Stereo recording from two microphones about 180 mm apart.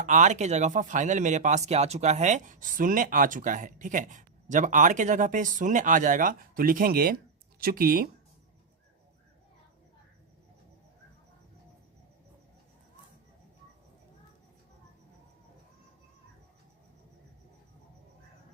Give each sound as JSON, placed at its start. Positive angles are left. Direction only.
{"t": 0.0, "sound": "speech", "side_deg": -45}